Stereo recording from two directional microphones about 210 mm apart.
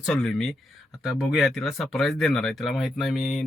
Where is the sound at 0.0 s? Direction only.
Centre (ahead or behind).